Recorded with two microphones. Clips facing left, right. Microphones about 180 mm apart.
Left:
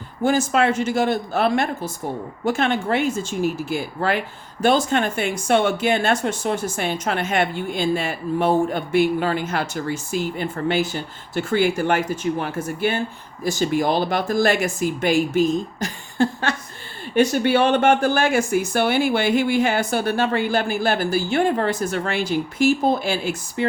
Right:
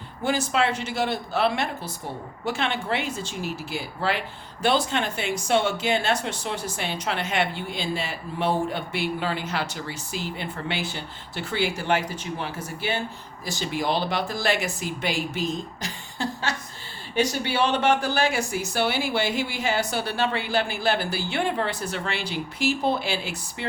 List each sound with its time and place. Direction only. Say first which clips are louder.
0.2 s speech: left 5 dB; 45° left (ahead or behind)